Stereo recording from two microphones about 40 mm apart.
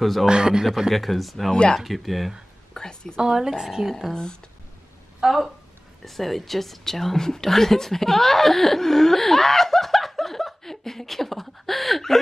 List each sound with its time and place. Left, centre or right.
0.0 s speech: centre
0.3 s speech: centre
0.9 s speech: centre
1.5 s speech: centre
1.8 s speech: centre
2.7 s whispering: centre
3.2 s speech: centre
4.1 s speech: centre
5.2 s a woman's voice: centre